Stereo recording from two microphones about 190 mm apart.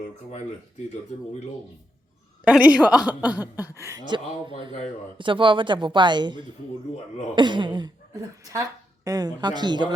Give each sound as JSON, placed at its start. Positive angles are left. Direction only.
{"t": 2.4, "sound": "speech", "side_deg": -5}